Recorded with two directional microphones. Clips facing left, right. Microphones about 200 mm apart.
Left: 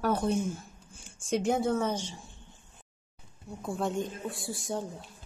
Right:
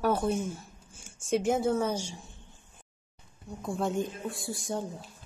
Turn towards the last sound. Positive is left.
turn(degrees=0)  # may be behind; listen again after turning